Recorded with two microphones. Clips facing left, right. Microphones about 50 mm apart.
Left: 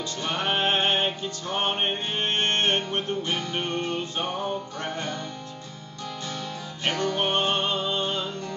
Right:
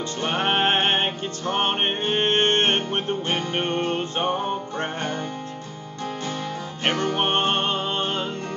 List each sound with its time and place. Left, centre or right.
0.2 s music: right
6.8 s music: right